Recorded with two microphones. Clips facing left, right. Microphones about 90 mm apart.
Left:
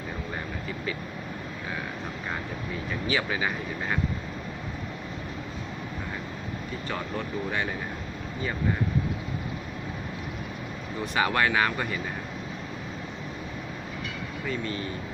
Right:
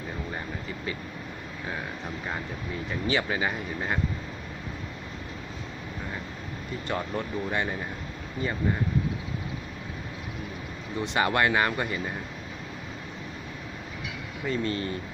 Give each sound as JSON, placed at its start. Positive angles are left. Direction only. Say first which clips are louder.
{"t": 2.9, "sound": "speech", "louder": "right 1 dB", "side_deg": -35}
{"t": 11.0, "sound": "speech", "louder": "right 1 dB", "side_deg": -25}
{"t": 14.4, "sound": "speech", "louder": "right 4 dB", "side_deg": -40}